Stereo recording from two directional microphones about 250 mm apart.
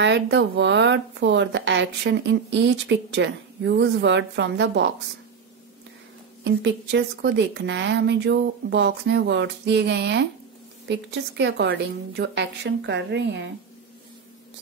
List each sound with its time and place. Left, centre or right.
0.0 s a woman's voice: right
6.4 s a woman's voice: right